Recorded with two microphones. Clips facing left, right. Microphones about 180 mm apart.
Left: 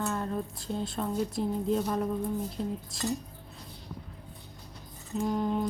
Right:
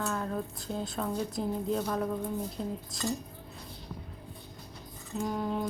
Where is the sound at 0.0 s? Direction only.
Centre (ahead or behind).